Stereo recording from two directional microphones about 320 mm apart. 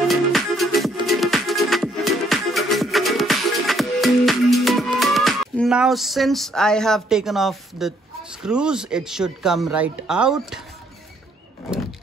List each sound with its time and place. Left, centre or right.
0.1 s music: centre